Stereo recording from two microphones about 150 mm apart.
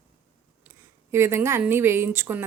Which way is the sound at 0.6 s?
15° right (ahead or behind).